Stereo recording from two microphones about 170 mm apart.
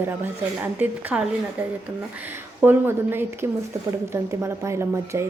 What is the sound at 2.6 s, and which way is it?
A woman's voice, 10° right (ahead or behind).